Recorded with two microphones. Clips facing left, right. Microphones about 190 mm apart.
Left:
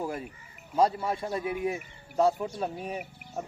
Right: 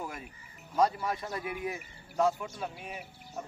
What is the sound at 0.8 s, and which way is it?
Speech, 25° left (ahead or behind).